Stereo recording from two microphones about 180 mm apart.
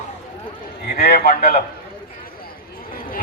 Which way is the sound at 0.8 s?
55° left (ahead or behind).